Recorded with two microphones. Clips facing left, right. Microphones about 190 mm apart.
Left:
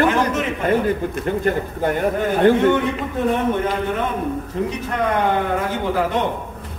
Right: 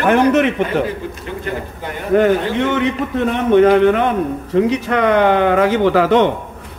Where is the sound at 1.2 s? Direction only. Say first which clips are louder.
Left 4 dB; 45° left (ahead or behind).